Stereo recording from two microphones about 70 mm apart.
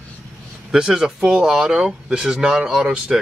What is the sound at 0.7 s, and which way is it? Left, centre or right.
Speech, centre.